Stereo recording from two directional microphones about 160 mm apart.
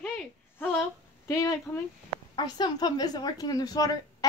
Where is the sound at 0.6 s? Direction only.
15° left (ahead or behind).